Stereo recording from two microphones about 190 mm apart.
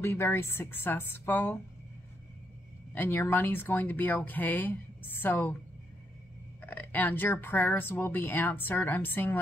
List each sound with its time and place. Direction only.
0.0 s speech: 15° left (ahead or behind)
2.9 s speech: 10° left (ahead or behind)
6.6 s speech: 10° left (ahead or behind)